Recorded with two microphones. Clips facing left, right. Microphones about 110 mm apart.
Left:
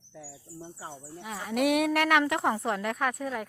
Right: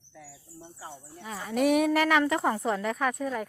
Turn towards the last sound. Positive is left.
turn(degrees=0)  # may be behind; listen again after turning